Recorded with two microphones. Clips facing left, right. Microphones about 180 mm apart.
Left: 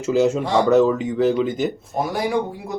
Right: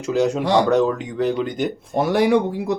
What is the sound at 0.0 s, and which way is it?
Speech, centre (ahead or behind).